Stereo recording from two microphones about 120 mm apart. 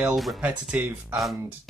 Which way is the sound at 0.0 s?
Centre (ahead or behind).